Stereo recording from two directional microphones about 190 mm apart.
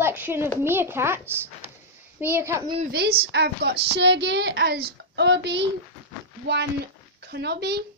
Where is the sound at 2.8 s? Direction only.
55° right (ahead or behind).